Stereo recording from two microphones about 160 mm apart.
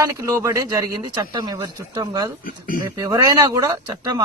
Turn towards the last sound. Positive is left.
turn(degrees=-20)  # may be behind; listen again after turning